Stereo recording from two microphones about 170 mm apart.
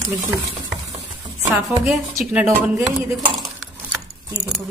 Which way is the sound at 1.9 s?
Centre (ahead or behind).